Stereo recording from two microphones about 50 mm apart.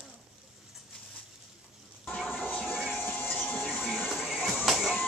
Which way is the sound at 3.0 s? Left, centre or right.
Left.